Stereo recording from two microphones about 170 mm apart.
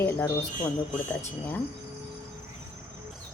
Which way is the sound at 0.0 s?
10° left (ahead or behind).